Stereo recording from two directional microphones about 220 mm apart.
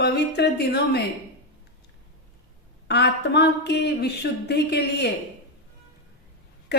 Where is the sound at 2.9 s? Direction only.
50° left (ahead or behind).